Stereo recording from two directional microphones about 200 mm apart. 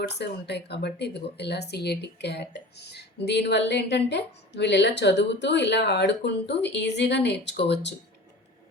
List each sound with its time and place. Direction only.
0.2 s speech: 55° left (ahead or behind)